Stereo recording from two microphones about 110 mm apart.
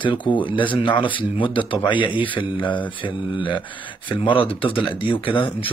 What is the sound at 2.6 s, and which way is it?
Mantra, 15° left (ahead or behind).